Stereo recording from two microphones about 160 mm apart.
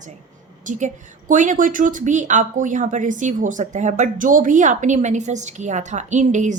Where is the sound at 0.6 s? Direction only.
50° right (ahead or behind).